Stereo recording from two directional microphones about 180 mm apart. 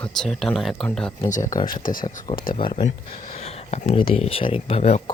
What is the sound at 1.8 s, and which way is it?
Speech, 50° left (ahead or behind).